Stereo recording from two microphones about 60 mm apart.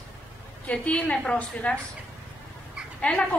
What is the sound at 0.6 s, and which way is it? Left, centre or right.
A woman's voice, centre.